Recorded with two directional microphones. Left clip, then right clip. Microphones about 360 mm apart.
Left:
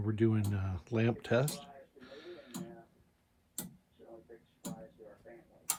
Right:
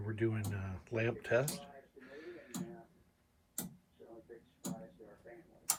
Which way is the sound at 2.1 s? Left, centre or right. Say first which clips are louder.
Even; centre.